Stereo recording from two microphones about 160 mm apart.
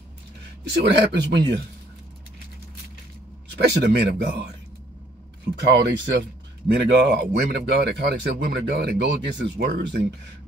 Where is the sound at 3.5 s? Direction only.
90° right.